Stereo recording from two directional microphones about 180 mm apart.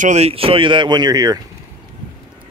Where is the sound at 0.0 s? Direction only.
35° right (ahead or behind); by 1.4 s 20° right (ahead or behind).